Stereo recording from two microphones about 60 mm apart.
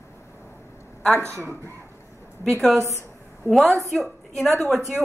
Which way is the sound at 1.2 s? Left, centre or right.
Right.